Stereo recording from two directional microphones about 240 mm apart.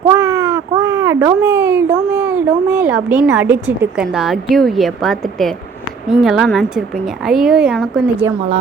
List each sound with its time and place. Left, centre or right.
0.1 s a child's voice: centre